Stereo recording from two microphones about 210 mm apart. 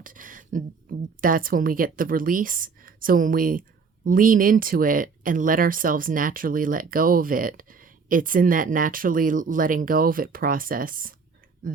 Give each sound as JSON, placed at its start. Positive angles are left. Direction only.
{"t": 0.0, "sound": "speech", "side_deg": -40}